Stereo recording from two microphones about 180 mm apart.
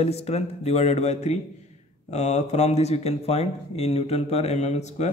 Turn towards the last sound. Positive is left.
turn(degrees=40)  # may be behind; listen again after turning